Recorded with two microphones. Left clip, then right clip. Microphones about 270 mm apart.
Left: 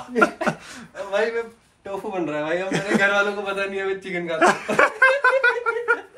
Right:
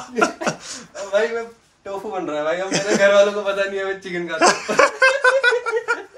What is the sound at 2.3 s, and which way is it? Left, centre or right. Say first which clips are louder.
Speech: right 4 dB; centre.